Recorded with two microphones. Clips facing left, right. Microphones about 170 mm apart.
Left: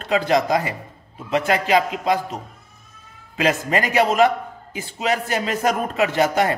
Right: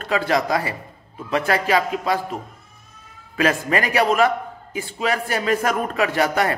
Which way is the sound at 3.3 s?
20° left (ahead or behind).